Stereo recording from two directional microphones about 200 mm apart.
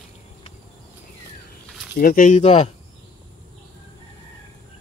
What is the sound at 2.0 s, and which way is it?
Speech, 45° left (ahead or behind).